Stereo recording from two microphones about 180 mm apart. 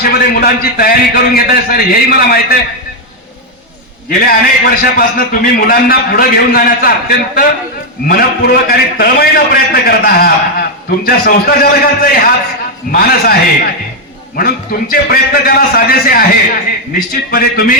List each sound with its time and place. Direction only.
0.0 s a man's voice: 55° left (ahead or behind)
4.2 s a man's voice: 55° left (ahead or behind)